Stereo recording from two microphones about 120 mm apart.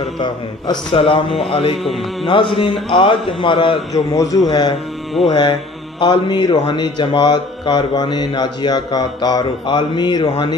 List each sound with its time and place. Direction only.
0.2 s a man's voice: 45° left (ahead or behind)
1.8 s music: centre (ahead or behind)
2.2 s a man's voice: 45° left (ahead or behind)
3.9 s a man's voice: 30° left (ahead or behind)